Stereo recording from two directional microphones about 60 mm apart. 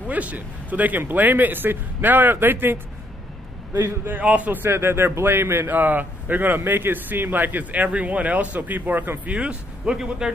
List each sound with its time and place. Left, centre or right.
0.1 s speech: right
4.2 s speech: right
5.7 s a man's voice: right; by 10.3 s centre